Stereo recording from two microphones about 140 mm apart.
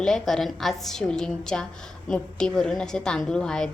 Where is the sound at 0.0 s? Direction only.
5° left (ahead or behind).